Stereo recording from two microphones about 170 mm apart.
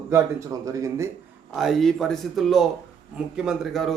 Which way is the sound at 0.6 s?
20° right (ahead or behind).